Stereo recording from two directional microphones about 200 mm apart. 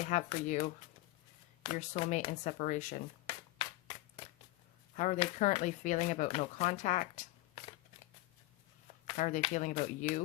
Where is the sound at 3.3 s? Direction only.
25° left (ahead or behind).